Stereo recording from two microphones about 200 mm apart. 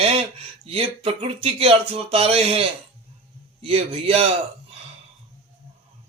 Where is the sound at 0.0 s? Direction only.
30° right (ahead or behind).